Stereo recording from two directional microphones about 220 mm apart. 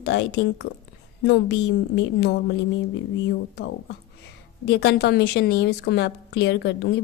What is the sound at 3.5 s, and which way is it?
A woman's voice, 50° left (ahead or behind).